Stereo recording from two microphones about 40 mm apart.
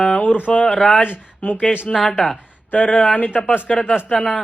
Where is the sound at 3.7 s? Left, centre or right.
Left.